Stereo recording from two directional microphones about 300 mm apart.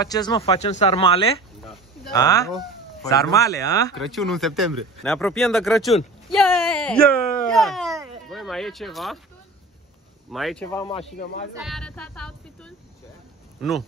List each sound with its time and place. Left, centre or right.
0.0 s speech: centre
4.0 s speech: centre
6.2 s a sound: centre
8.3 s speech: centre
10.3 s speech: centre
11.1 s speech: left
11.5 s music: centre
13.6 s speech: centre